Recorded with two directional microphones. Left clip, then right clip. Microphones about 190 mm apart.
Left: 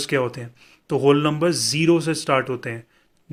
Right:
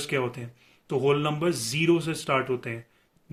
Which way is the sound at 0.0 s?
50° left (ahead or behind).